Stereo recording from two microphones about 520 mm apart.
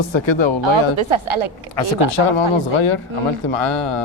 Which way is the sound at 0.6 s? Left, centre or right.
Right.